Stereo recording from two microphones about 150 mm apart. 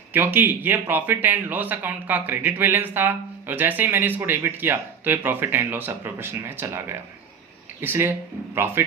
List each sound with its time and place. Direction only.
0.1 s speech: 15° right (ahead or behind)